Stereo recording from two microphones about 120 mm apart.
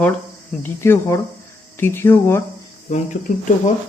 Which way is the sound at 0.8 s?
25° left (ahead or behind).